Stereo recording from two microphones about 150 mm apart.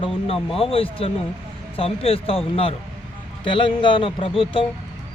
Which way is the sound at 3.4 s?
35° left (ahead or behind).